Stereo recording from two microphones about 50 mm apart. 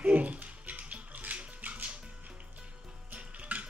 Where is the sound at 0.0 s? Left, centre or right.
Right.